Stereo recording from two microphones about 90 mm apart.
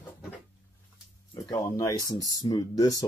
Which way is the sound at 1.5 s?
40° left (ahead or behind).